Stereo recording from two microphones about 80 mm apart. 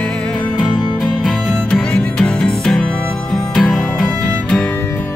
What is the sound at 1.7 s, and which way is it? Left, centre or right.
Music, centre.